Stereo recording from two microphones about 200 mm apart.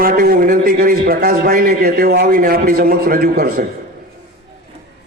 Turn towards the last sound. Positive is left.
turn(degrees=-50)  # may be behind; listen again after turning